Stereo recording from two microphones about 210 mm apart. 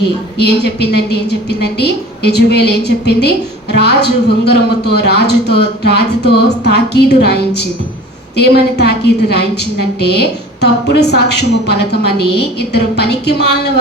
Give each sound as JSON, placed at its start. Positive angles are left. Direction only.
{"t": 0.6, "sound": "a woman's voice", "side_deg": 50}
{"t": 8.8, "sound": "a woman's voice", "side_deg": 50}